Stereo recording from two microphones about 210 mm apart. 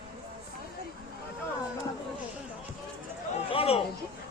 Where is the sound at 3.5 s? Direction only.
25° left (ahead or behind).